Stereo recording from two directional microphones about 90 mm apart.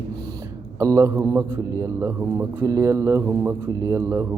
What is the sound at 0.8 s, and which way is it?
Speech, 35° right (ahead or behind).